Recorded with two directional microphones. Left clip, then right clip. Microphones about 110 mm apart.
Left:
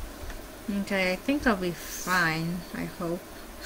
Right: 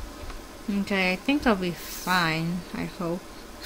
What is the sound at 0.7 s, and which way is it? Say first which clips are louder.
A woman's voice: right 2 dB; 35° right (ahead or behind).